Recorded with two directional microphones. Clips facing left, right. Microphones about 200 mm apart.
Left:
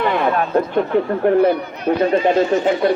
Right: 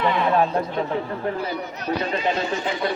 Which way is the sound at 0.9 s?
65° left (ahead or behind).